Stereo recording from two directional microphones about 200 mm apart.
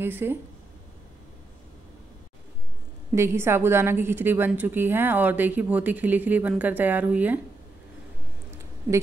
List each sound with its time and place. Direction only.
0.0 s a woman's voice: 10° right (ahead or behind)
3.2 s a woman's voice: 10° right (ahead or behind)